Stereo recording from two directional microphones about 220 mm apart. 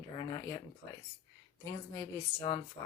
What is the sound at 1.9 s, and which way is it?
Speech, 15° left (ahead or behind).